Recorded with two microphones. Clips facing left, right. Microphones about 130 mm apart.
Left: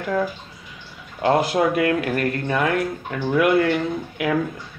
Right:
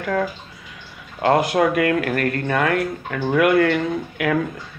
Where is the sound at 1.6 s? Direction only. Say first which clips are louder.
Right 1 dB; 50° right (ahead or behind).